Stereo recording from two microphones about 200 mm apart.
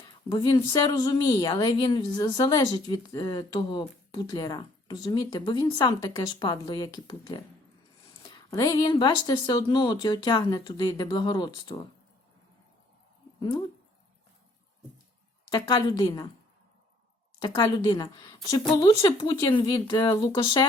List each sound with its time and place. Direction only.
0.3 s speech: 20° left (ahead or behind)
15.5 s speech: 20° left (ahead or behind)
17.4 s speech: 20° left (ahead or behind)